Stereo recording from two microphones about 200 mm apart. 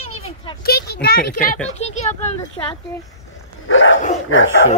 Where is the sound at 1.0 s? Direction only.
45° left (ahead or behind).